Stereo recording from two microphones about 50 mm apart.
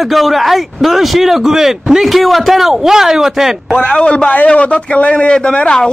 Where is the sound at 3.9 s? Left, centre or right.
Left.